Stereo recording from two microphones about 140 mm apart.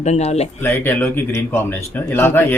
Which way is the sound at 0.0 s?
50° left (ahead or behind).